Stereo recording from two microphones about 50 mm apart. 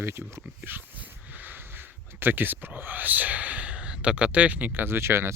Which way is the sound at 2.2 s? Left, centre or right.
Right.